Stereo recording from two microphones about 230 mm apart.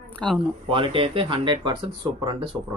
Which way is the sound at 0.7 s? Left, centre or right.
Right.